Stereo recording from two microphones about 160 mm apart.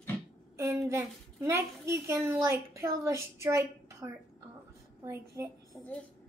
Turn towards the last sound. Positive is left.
turn(degrees=5)  # may be behind; listen again after turning